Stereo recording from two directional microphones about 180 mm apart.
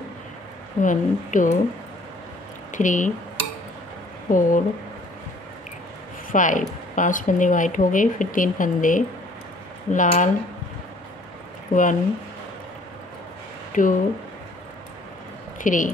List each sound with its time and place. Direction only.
0.8 s speech: 45° left (ahead or behind)
2.7 s speech: 45° left (ahead or behind)
4.3 s speech: 45° left (ahead or behind)
6.3 s speech: 45° left (ahead or behind)
11.7 s speech: 45° left (ahead or behind)
13.7 s speech: 45° left (ahead or behind)
15.6 s speech: 45° left (ahead or behind)